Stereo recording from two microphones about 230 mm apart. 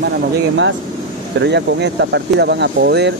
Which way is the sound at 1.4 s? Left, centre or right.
Right.